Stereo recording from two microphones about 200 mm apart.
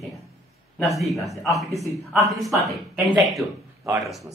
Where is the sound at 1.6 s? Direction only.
15° right (ahead or behind).